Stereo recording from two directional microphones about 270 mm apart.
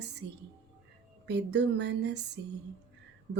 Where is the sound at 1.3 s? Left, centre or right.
Right.